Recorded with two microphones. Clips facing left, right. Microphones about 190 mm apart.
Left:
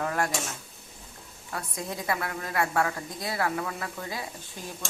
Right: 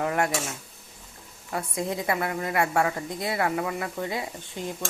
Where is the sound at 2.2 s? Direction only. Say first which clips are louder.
Right 4 dB; 20° right (ahead or behind).